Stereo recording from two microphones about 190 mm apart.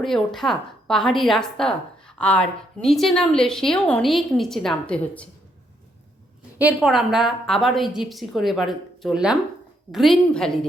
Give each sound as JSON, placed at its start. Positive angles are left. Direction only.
{"t": 0.0, "sound": "a woman's voice", "side_deg": 0}
{"t": 6.6, "sound": "a woman's voice", "side_deg": -5}